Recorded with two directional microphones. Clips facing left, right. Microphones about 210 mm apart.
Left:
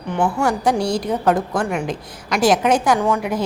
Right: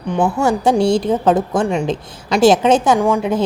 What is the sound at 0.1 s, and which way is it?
A woman's voice, 25° right (ahead or behind).